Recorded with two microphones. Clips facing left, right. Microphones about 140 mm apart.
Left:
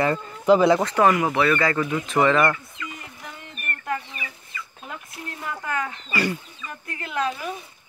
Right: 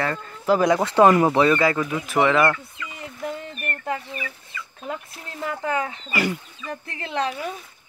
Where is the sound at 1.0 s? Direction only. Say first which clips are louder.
Right 4 dB; 15° right (ahead or behind).